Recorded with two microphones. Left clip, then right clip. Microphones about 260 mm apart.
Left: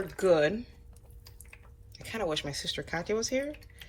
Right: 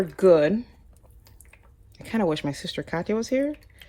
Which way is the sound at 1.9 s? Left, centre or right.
Right.